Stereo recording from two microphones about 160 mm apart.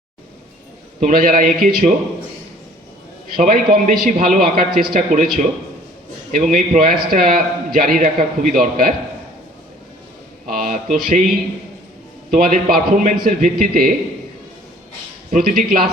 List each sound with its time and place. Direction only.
0.9 s a man's voice: 60° right (ahead or behind)
3.3 s a man's voice: 65° right (ahead or behind)
10.5 s a sound: 60° right (ahead or behind)
12.3 s a man's voice: 60° right (ahead or behind)
15.3 s a man's voice: 60° right (ahead or behind)